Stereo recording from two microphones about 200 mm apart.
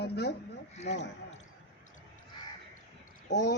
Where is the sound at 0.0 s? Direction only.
55° left (ahead or behind).